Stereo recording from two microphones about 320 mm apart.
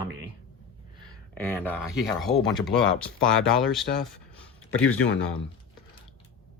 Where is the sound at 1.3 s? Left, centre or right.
Centre.